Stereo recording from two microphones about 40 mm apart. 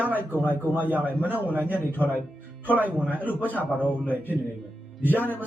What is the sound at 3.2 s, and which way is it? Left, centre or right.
Speech, left.